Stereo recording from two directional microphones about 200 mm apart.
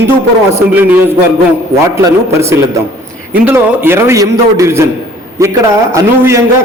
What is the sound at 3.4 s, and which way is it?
A man's voice, 10° right (ahead or behind).